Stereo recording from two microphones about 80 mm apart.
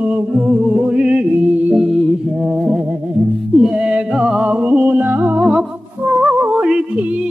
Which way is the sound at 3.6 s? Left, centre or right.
Centre.